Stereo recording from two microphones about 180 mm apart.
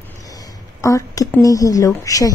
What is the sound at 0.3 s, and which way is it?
Speech, 20° left (ahead or behind).